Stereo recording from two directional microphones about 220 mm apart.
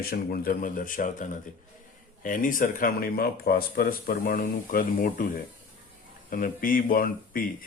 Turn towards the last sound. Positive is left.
turn(degrees=40)  # may be behind; listen again after turning